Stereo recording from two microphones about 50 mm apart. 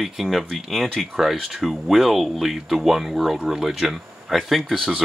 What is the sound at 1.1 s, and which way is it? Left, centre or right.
Speech, centre.